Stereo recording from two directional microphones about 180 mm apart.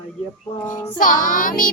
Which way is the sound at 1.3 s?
50° left (ahead or behind).